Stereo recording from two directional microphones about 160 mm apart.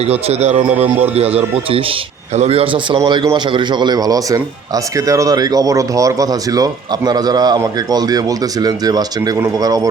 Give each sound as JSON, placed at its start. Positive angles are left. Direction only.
{"t": 0.1, "sound": "speech", "side_deg": -40}
{"t": 0.8, "sound": "speech", "side_deg": -10}
{"t": 1.1, "sound": "a man's voice", "side_deg": -40}